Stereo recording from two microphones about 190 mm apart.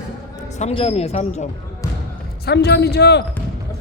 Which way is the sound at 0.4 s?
35° left (ahead or behind).